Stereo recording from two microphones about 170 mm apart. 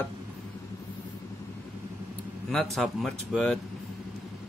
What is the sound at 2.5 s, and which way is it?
Speech, centre (ahead or behind).